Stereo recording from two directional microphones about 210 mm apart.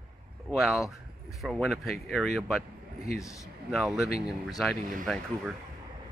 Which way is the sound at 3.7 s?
Centre (ahead or behind).